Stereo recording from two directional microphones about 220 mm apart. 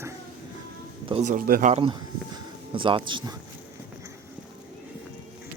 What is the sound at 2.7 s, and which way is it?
Speech, 20° right (ahead or behind).